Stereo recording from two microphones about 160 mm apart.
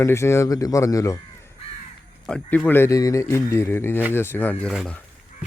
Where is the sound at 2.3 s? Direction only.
10° left (ahead or behind).